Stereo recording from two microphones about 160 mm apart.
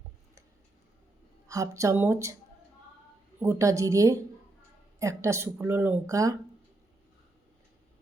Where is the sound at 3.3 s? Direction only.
20° right (ahead or behind).